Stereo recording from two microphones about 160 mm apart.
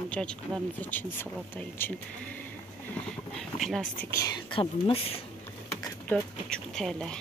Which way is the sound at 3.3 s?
Centre (ahead or behind).